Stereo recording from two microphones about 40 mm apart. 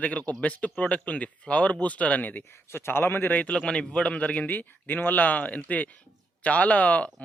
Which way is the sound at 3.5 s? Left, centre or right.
Left.